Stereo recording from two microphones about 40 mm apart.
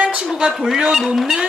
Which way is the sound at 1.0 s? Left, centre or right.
Centre.